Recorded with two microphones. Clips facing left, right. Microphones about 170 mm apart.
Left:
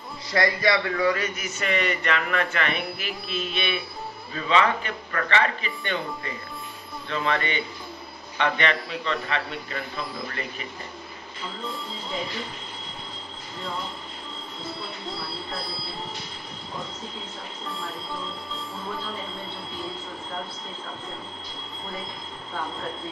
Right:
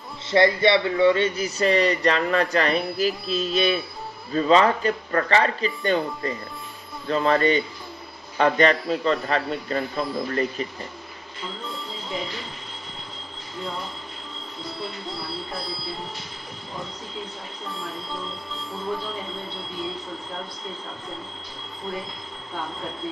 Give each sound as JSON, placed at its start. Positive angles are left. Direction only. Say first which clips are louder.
{"t": 0.3, "sound": "a man's voice", "louder": "right 5 dB", "side_deg": -25}
{"t": 14.7, "sound": "speech", "louder": "right 2 dB", "side_deg": 0}
{"t": 17.6, "sound": "speech", "louder": "right 1 dB", "side_deg": 0}